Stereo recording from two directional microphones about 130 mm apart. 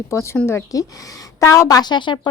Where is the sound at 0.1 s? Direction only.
20° left (ahead or behind).